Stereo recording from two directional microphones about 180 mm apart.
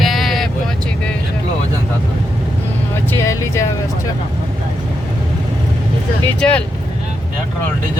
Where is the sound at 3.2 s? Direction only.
15° left (ahead or behind).